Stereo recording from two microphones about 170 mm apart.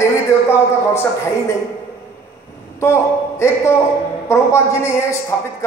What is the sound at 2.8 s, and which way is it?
A man's voice, 15° left (ahead or behind).